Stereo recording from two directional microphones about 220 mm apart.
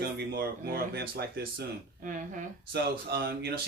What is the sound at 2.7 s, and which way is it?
Speech, 45° right (ahead or behind).